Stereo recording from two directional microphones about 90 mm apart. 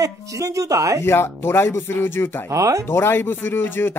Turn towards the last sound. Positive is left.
turn(degrees=25)  # may be behind; listen again after turning